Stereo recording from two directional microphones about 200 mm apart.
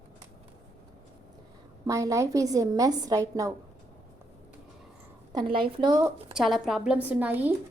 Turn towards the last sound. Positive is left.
turn(degrees=-10)  # may be behind; listen again after turning